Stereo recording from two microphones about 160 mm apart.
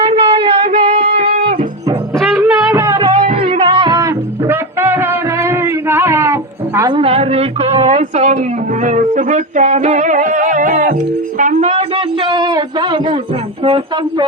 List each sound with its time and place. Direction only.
0.0 s a sound: 35° right (ahead or behind)
0.8 s music: 30° right (ahead or behind)
1.0 s music: 75° right (ahead or behind)
2.1 s music: 5° left (ahead or behind)
2.4 s music: 20° right (ahead or behind)
3.1 s music: 55° right (ahead or behind)
3.4 s music: 40° right (ahead or behind); by 6.9 s 15° right (ahead or behind)
6.9 s a sound: 40° right (ahead or behind)
8.8 s music: 50° right (ahead or behind)
12.2 s a sound: 30° right (ahead or behind)
13.7 s music: 35° right (ahead or behind)